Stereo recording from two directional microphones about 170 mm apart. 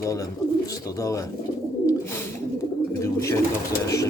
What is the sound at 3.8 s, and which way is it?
Speech, 20° left (ahead or behind).